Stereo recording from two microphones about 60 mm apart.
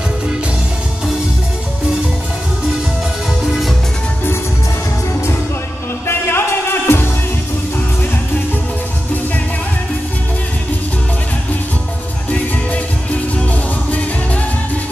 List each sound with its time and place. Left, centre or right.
6.0 s music: left